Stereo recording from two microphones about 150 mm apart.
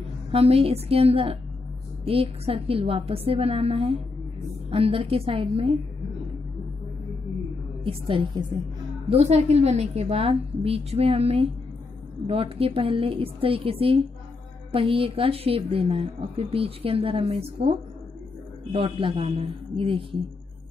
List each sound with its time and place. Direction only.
0.3 s a woman's voice: 40° right (ahead or behind)
7.8 s a woman's voice: 35° right (ahead or behind)